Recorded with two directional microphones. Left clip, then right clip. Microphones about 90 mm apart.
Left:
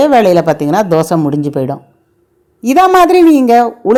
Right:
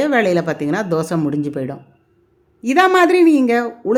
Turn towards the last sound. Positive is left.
turn(degrees=50)  # may be behind; listen again after turning